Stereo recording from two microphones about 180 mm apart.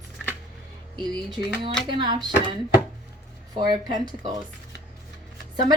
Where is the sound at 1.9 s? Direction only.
25° right (ahead or behind).